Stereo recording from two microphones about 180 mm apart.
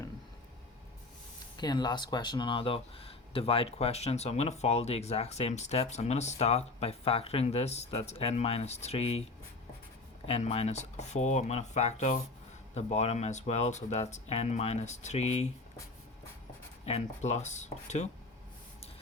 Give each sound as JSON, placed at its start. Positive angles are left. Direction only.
{"t": 1.5, "sound": "speech", "side_deg": 25}
{"t": 10.2, "sound": "speech", "side_deg": 35}
{"t": 16.8, "sound": "speech", "side_deg": 35}